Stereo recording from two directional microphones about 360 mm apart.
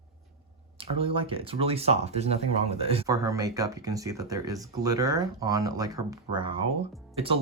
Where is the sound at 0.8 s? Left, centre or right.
Centre.